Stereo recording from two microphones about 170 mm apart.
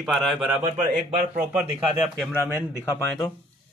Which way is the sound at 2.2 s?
10° left (ahead or behind).